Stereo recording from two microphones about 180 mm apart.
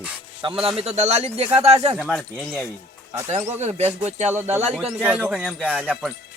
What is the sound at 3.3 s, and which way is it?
Speech, 40° right (ahead or behind).